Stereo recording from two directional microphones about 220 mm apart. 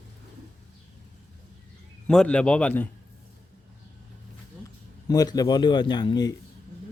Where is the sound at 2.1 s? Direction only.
5° left (ahead or behind).